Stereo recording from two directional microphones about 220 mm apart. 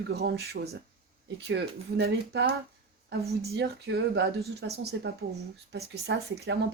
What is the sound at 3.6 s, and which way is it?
Speech, 50° right (ahead or behind).